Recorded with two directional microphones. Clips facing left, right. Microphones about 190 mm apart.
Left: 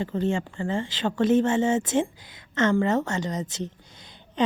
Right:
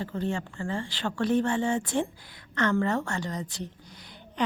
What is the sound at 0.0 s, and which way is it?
Speech, 20° left (ahead or behind).